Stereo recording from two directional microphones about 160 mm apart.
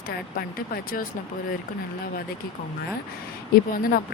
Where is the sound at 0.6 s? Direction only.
65° left (ahead or behind).